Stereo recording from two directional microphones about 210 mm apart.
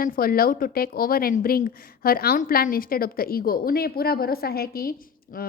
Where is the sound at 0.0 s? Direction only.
45° left (ahead or behind).